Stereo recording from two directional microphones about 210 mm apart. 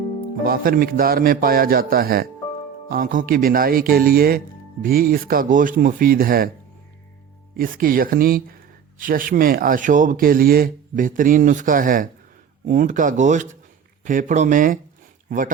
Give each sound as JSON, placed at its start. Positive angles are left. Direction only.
{"t": 0.4, "sound": "speech", "side_deg": -45}
{"t": 7.5, "sound": "speech", "side_deg": -40}